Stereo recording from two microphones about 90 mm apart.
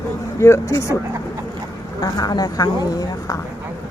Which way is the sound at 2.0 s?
45° left (ahead or behind).